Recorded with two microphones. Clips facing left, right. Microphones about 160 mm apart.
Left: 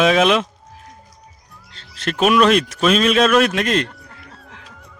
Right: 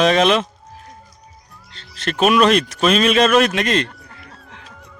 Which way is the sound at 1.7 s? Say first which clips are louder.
Even; 5° left (ahead or behind).